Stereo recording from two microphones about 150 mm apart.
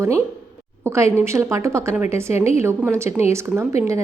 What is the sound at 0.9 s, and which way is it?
A woman's voice, 20° right (ahead or behind).